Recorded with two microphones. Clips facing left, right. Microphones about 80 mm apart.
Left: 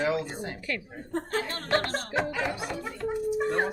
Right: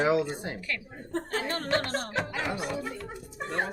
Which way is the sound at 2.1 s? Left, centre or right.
Left.